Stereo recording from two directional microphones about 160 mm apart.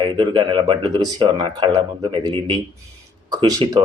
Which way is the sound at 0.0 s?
25° right (ahead or behind).